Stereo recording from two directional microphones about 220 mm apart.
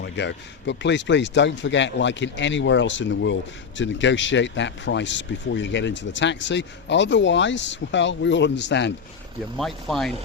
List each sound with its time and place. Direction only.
0.0 s speech: 55° left (ahead or behind)
9.6 s speech: centre (ahead or behind)